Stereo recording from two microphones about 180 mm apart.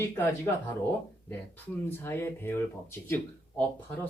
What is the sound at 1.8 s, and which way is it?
Speech, 15° left (ahead or behind).